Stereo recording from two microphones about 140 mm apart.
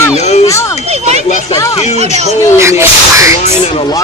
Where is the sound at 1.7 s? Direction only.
50° left (ahead or behind).